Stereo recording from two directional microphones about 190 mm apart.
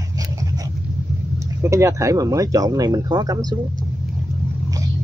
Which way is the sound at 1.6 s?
15° right (ahead or behind).